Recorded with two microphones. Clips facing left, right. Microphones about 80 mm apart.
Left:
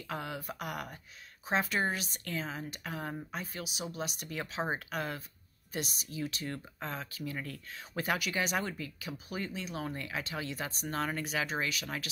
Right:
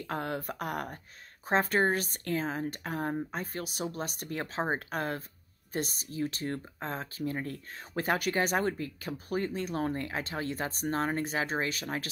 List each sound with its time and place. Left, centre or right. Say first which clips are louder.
0.0 s speech: right 5 dB; right